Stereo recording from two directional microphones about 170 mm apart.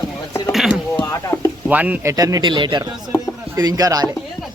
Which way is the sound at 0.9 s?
20° left (ahead or behind).